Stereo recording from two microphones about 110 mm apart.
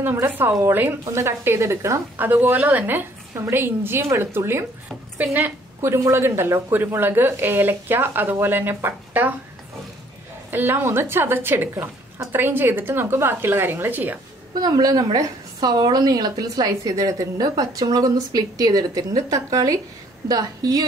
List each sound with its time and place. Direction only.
0.0 s a woman's voice: 20° right (ahead or behind)
10.5 s a woman's voice: 20° right (ahead or behind)
14.5 s a woman's voice: 40° right (ahead or behind)